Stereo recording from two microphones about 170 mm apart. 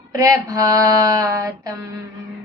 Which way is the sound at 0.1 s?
20° right (ahead or behind).